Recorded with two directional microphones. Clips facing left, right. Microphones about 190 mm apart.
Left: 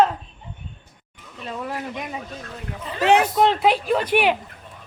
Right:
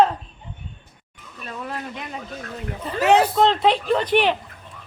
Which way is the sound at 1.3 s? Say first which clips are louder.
Left 3 dB; 20° left (ahead or behind).